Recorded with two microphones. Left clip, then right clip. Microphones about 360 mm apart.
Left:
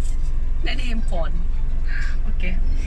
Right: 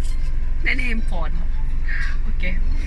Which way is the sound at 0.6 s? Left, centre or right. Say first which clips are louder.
Right 7 dB; centre.